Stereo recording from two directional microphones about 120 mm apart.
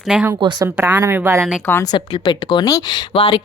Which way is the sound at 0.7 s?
15° right (ahead or behind).